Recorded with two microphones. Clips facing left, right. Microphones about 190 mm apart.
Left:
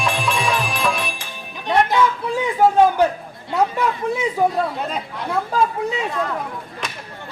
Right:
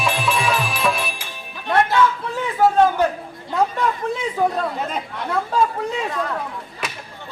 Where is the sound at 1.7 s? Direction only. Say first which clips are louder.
Left 1 dB; 15° left (ahead or behind).